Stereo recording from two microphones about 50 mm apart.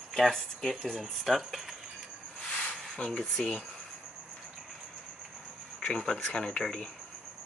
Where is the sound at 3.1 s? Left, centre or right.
Centre.